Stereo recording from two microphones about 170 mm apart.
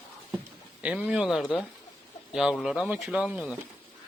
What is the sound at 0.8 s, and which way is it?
Speech, 5° right (ahead or behind).